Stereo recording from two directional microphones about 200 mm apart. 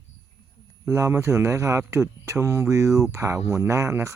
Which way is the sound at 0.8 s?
15° right (ahead or behind).